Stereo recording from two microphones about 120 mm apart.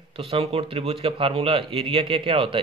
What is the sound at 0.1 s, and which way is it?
Speech, 55° right (ahead or behind).